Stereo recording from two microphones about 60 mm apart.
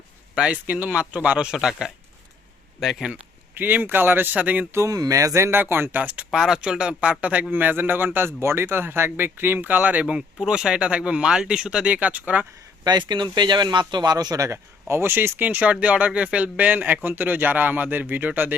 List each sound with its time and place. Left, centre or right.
0.3 s speech: right
1.5 s speech: centre
3.5 s speech: right
4.9 s speech: right
5.5 s speech: right
6.3 s speech: centre; by 8.3 s right
8.3 s speech: right
14.1 s speech: right